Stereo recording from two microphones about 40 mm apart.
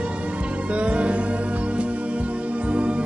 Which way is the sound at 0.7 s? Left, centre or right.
Right.